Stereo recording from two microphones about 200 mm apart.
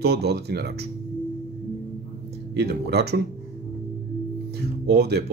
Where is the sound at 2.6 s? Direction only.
55° right (ahead or behind).